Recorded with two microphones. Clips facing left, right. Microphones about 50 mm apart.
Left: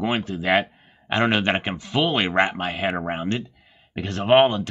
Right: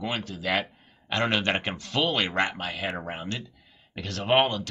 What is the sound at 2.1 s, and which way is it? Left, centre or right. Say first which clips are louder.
Speech: left 5 dB; left.